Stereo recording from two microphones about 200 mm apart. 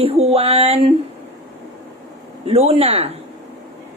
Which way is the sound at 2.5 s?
30° right (ahead or behind).